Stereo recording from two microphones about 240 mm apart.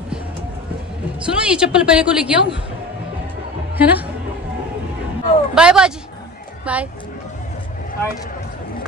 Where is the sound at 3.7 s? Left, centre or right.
Centre.